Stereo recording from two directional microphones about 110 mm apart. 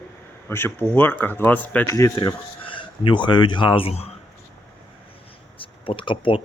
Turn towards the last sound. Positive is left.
turn(degrees=50)  # may be behind; listen again after turning